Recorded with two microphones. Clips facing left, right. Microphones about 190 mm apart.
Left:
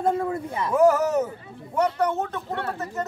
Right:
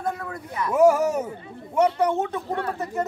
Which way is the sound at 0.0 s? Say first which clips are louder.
Left 6 dB; 25° left (ahead or behind).